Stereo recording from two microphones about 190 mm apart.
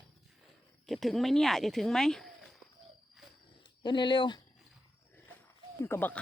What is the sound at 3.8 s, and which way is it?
Speech, 25° left (ahead or behind).